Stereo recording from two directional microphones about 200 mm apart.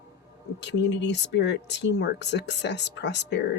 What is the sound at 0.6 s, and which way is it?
Speech, 60° left (ahead or behind).